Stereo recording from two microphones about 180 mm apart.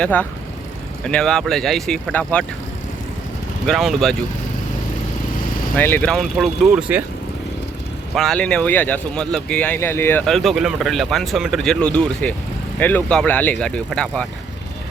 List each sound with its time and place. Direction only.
0.0 s speech: 5° left (ahead or behind)
3.7 s speech: centre (ahead or behind)
5.7 s speech: 10° left (ahead or behind); by 7.0 s 5° right (ahead or behind)
8.1 s speech: centre (ahead or behind)